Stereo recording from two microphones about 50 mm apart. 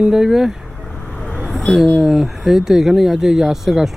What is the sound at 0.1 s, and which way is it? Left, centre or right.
Speech, centre.